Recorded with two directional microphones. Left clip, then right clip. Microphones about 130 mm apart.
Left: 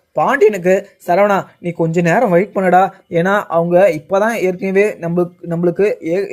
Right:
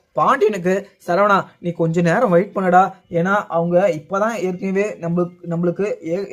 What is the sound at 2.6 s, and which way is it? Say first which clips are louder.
Speech: left 2 dB; 45° left (ahead or behind).